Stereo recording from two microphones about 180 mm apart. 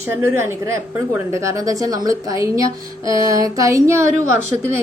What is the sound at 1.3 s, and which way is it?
A woman's voice, 15° right (ahead or behind).